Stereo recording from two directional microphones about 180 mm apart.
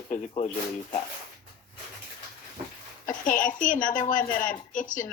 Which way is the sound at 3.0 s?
45° left (ahead or behind).